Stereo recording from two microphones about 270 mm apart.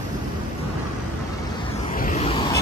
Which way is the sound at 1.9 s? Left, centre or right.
Left.